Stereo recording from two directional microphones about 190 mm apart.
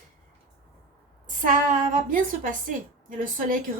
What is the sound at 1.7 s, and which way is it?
A woman's voice, 45° right (ahead or behind).